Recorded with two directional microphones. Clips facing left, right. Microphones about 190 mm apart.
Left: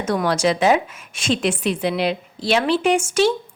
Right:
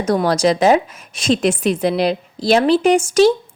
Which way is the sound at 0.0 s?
40° right (ahead or behind).